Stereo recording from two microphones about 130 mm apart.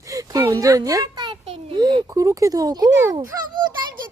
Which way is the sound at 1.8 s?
35° right (ahead or behind).